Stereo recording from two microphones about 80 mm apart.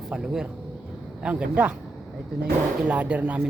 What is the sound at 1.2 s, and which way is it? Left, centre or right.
Speech, centre.